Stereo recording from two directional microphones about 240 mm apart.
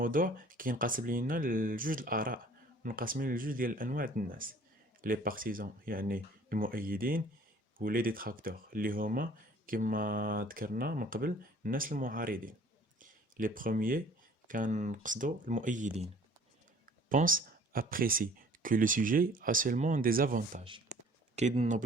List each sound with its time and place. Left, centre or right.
0.0 s speech: right
17.1 s speech: right